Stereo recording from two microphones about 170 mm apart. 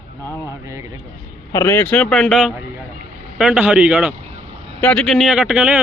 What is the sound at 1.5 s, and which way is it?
Speech, 20° left (ahead or behind).